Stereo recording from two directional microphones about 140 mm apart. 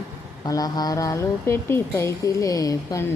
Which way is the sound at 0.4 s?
25° left (ahead or behind).